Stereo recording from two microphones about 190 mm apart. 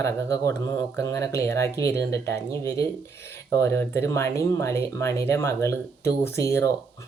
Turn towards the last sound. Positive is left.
turn(degrees=15)  # may be behind; listen again after turning